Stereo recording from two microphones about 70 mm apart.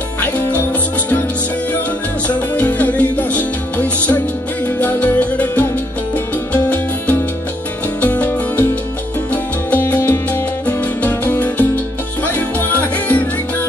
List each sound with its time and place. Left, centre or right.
0.2 s music: left
2.2 s music: left